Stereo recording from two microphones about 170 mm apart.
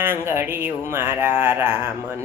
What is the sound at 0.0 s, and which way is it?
Speech, 15° right (ahead or behind).